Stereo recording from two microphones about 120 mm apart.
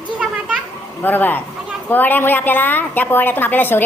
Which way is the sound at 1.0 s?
15° left (ahead or behind).